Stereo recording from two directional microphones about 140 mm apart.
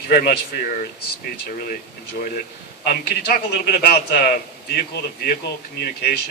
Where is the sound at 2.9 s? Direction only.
90° left.